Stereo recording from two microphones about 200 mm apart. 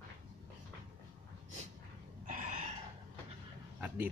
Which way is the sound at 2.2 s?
40° right (ahead or behind).